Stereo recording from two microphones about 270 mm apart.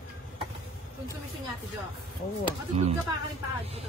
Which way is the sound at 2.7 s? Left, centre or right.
Right.